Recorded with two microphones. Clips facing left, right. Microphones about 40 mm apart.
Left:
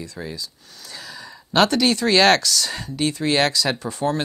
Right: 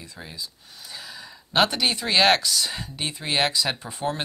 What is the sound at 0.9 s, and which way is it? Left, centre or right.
Speech, centre.